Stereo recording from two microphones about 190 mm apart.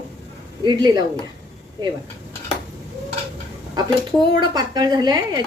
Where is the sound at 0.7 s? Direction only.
20° right (ahead or behind).